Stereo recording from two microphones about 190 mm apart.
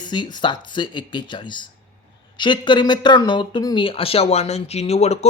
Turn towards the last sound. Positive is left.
turn(degrees=35)  # may be behind; listen again after turning